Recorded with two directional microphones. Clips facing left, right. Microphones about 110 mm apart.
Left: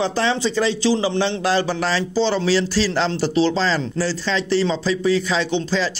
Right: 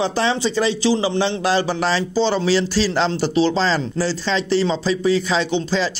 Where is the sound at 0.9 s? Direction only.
5° right (ahead or behind).